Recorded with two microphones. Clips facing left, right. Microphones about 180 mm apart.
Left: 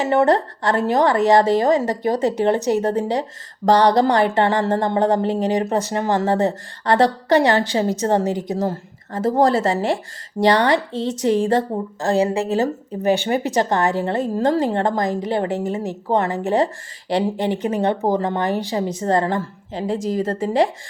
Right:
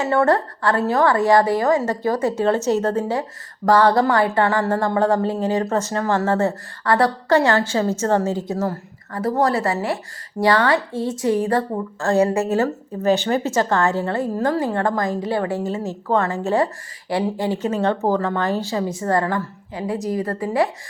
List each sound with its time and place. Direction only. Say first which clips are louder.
0.0 s speech: left 1 dB; 20° left (ahead or behind)